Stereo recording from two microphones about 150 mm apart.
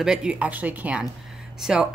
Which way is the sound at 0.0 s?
5° right (ahead or behind).